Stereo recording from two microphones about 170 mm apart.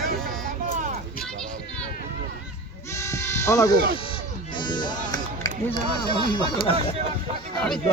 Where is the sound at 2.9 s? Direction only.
15° left (ahead or behind).